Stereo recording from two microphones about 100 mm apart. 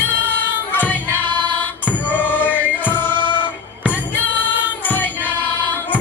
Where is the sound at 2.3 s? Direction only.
20° left (ahead or behind).